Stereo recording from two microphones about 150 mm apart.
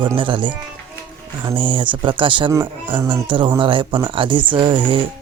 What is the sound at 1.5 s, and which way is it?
Speech, 35° right (ahead or behind).